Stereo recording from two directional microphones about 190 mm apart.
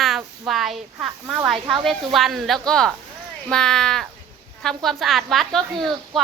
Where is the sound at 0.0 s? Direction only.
Centre (ahead or behind).